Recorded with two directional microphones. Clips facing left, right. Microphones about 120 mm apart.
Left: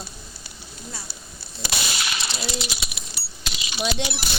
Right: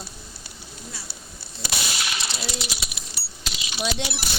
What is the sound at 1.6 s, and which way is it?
Whip, 90° left.